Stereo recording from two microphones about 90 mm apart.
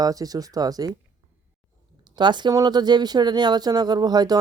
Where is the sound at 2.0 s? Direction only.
55° right (ahead or behind).